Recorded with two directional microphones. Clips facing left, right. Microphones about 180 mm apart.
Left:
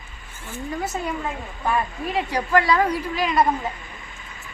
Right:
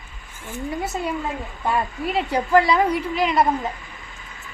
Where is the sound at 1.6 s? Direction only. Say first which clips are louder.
Right 1 dB; 20° right (ahead or behind).